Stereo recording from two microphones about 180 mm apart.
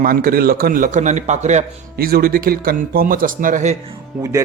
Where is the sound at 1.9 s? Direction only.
55° right (ahead or behind).